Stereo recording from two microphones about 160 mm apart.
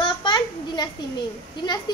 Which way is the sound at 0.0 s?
30° left (ahead or behind).